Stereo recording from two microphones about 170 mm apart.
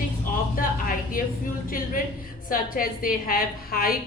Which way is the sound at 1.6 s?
55° left (ahead or behind).